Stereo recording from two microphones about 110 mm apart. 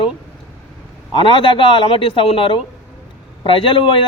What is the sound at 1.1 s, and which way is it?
A man's voice, 50° left (ahead or behind).